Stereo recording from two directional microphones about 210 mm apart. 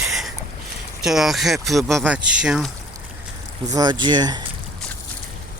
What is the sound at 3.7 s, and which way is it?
Speech, 20° right (ahead or behind).